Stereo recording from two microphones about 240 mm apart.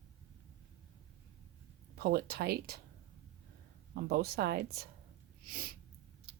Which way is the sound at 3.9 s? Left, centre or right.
Right.